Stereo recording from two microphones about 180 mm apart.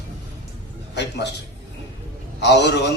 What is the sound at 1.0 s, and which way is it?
Speech, 70° left (ahead or behind).